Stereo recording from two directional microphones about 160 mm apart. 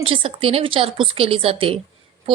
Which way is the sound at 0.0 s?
35° right (ahead or behind).